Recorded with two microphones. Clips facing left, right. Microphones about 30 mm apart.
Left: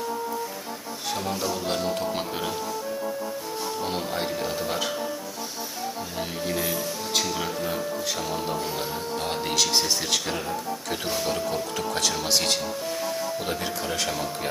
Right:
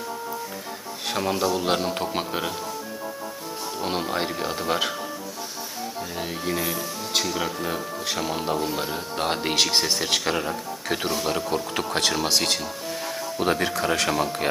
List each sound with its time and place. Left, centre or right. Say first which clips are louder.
1.1 s speech: right 5 dB; right
2.1 s speech: right 2 dB; centre
3.8 s speech: right 5 dB; right
6.2 s speech: right 1 dB; centre
8.0 s speech: right 1 dB; right
8.5 s speech: right 3 dB; centre
8.8 s speech: right 2 dB; right
11.7 s speech: right 2 dB; right